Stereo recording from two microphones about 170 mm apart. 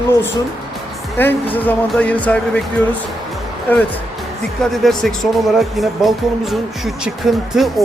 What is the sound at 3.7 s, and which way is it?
Speech, 10° left (ahead or behind).